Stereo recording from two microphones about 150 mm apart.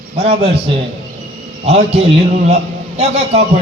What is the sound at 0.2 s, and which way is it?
Speech, 40° right (ahead or behind).